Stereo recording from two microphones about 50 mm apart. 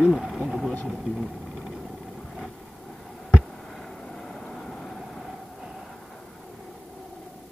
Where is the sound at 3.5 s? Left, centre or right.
Centre.